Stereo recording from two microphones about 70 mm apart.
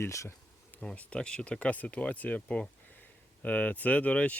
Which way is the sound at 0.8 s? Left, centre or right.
Centre.